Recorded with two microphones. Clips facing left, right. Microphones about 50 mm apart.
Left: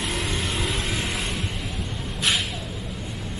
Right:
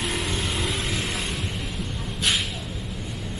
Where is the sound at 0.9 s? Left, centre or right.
Centre.